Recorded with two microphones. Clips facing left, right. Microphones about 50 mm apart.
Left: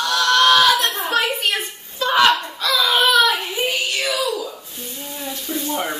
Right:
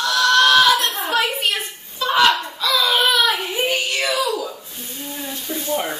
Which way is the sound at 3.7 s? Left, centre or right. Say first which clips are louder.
Right 1 dB; right.